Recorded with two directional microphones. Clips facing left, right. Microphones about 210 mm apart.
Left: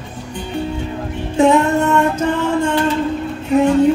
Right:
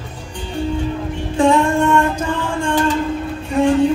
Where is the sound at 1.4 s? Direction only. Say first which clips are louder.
Left 1 dB; 20° left (ahead or behind).